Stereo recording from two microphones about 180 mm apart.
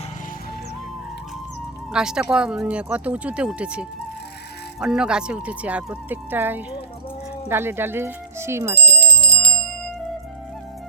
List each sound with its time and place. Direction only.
1.9 s speech: 5° right (ahead or behind)
8.9 s music: 60° left (ahead or behind)